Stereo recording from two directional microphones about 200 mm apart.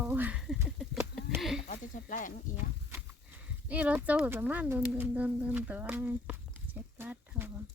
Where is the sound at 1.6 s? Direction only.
40° left (ahead or behind).